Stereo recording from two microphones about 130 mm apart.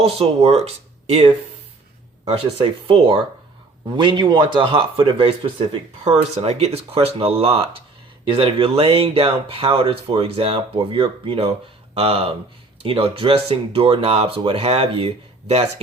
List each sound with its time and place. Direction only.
0.0 s speech: 50° right (ahead or behind)
2.2 s speech: 50° right (ahead or behind)